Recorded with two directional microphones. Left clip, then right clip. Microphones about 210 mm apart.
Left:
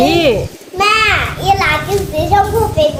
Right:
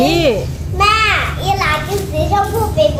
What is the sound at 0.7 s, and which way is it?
Children playing, 45° left (ahead or behind).